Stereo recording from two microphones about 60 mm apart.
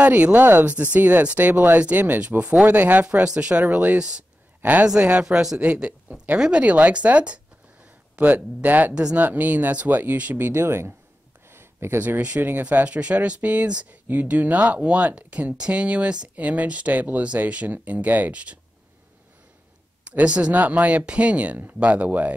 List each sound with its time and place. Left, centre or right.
0.0 s speech: right
4.8 s speech: centre; by 11.0 s right
11.4 s a sound: right
12.2 s speech: right
20.1 s speech: centre